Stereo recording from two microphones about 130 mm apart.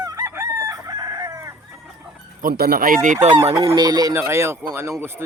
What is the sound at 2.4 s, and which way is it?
Speech, 90° right.